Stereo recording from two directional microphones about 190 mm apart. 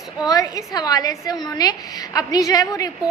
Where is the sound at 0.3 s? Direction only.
20° left (ahead or behind).